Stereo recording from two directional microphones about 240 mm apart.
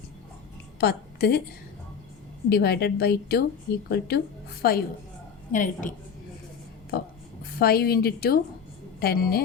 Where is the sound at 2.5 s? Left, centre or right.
Left.